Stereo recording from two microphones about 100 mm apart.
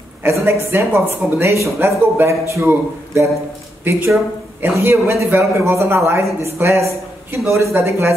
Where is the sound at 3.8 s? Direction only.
20° right (ahead or behind).